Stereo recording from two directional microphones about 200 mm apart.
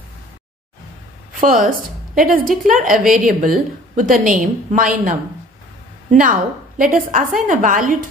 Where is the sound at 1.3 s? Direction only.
40° right (ahead or behind).